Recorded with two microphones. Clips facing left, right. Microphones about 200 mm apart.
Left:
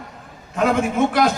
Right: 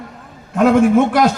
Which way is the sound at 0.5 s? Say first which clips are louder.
Right 8 dB; 50° right (ahead or behind).